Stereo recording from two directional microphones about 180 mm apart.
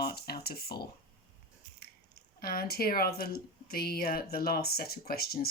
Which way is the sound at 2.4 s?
55° left (ahead or behind).